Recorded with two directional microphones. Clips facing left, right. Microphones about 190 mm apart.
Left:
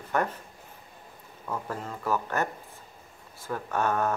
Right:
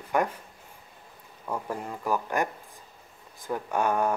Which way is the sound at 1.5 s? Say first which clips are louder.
Right 1 dB; 15° right (ahead or behind).